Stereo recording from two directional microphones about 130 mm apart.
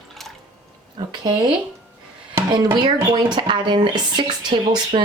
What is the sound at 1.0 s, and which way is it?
Speech, 35° right (ahead or behind).